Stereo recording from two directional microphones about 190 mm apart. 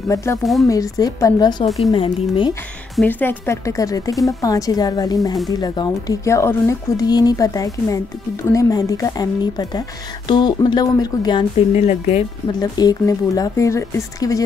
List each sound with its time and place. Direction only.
0.1 s speech: 15° left (ahead or behind)
0.4 s speech: centre (ahead or behind)
0.7 s a woman's voice: 20° left (ahead or behind)
3.0 s a woman's voice: 10° left (ahead or behind)
11.7 s speech: 35° left (ahead or behind)
12.5 s speech: 20° left (ahead or behind)